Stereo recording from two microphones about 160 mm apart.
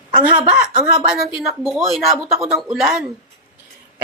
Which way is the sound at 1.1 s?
Centre (ahead or behind).